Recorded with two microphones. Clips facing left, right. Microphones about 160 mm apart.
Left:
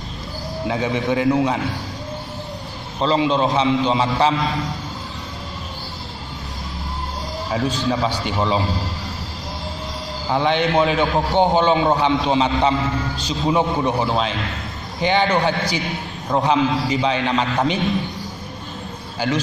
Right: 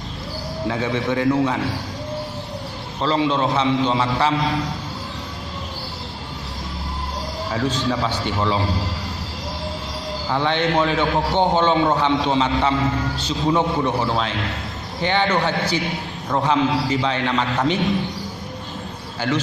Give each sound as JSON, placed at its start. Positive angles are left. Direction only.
{"t": 0.7, "sound": "a man's voice", "side_deg": 15}
{"t": 3.0, "sound": "a man's voice", "side_deg": 20}
{"t": 7.6, "sound": "a man's voice", "side_deg": 10}
{"t": 10.3, "sound": "a man's voice", "side_deg": 15}
{"t": 19.2, "sound": "a man's voice", "side_deg": 15}